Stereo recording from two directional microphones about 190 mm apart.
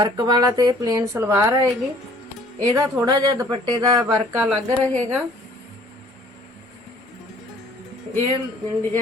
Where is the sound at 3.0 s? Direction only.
20° right (ahead or behind).